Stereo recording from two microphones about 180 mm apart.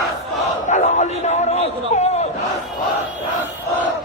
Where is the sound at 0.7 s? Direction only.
40° left (ahead or behind).